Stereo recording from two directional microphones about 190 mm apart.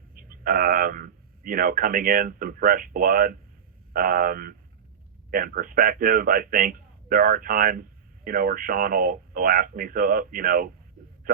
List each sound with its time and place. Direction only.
0.1 s a man's voice: 45° right (ahead or behind)